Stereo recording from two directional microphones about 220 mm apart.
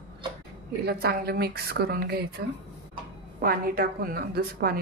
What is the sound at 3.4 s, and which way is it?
A woman's voice, 40° right (ahead or behind).